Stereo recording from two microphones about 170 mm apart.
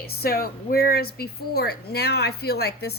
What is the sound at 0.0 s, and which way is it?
Speech, 65° left (ahead or behind).